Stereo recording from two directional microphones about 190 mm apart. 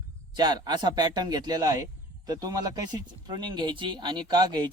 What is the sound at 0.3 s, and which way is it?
Speech, 20° right (ahead or behind).